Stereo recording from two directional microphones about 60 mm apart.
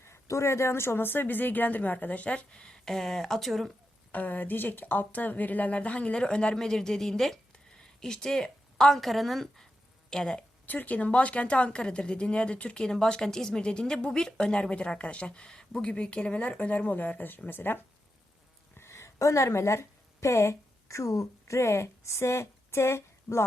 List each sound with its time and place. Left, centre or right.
0.0 s a woman's voice: left; by 3.7 s centre
4.1 s a woman's voice: left; by 10.4 s centre
10.7 s a woman's voice: left
18.8 s speech: left